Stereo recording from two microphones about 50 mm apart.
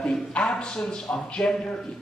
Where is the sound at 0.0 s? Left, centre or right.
Left.